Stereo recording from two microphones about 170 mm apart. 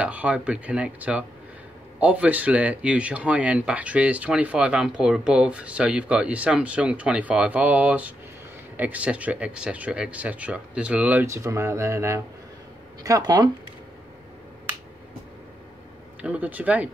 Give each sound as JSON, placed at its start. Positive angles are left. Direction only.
{"t": 0.0, "sound": "speech", "side_deg": -10}
{"t": 16.2, "sound": "speech", "side_deg": -10}